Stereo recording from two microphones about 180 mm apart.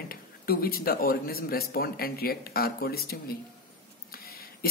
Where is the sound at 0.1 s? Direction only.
55° left (ahead or behind).